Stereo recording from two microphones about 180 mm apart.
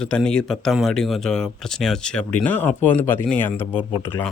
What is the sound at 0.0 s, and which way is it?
Speech, 5° left (ahead or behind).